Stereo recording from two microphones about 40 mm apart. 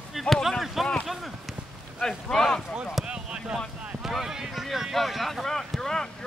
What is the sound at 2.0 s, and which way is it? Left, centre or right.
Speech, centre.